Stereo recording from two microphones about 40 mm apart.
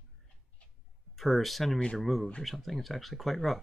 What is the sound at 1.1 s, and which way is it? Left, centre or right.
Speech, centre.